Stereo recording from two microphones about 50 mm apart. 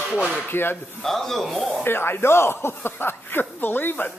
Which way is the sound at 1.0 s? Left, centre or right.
Centre.